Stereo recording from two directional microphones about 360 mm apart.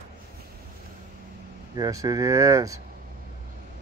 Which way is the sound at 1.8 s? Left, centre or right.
Centre.